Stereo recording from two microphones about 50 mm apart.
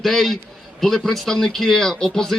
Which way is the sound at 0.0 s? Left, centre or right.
Centre.